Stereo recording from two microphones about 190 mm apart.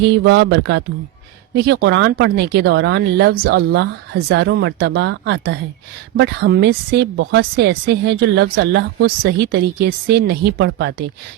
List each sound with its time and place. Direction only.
0.0 s a woman's voice: 65° right (ahead or behind)